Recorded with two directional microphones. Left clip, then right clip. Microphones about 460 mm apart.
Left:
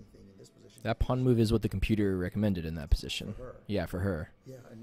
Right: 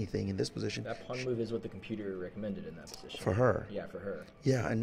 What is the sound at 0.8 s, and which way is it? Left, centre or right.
Speech, left.